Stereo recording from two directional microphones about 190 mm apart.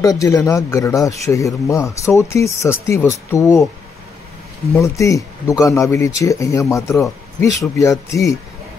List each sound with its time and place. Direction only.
0.0 s speech: 15° left (ahead or behind)
4.7 s speech: 15° left (ahead or behind)